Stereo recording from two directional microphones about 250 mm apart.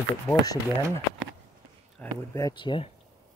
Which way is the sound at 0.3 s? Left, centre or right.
Centre.